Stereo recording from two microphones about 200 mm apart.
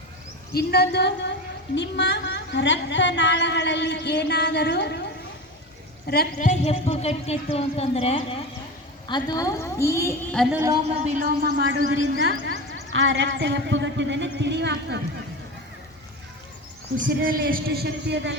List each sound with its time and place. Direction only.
0.5 s a woman's voice: 50° left (ahead or behind)
6.1 s a woman's voice: 50° left (ahead or behind)
6.5 s a woman's voice: 35° left (ahead or behind); by 10.2 s 15° left (ahead or behind)
10.3 s a woman's voice: centre (ahead or behind)
10.8 s a man's voice: 30° right (ahead or behind); by 11.6 s 45° right (ahead or behind)
11.9 s a woman's voice: 80° right; by 14.9 s 60° right (ahead or behind)
17.0 s speech: 45° right (ahead or behind)